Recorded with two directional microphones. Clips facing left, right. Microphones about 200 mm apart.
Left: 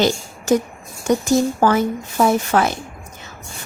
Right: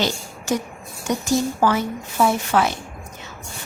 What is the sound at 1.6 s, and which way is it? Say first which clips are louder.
Speech: left 4 dB; 45° left (ahead or behind).